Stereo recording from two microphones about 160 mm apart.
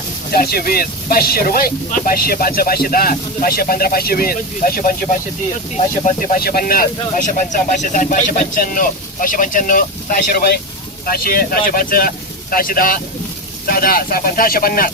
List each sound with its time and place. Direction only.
0.3 s speech: 75° left (ahead or behind)
7.2 s speech: 50° left (ahead or behind)
10.3 s speech: 70° left (ahead or behind)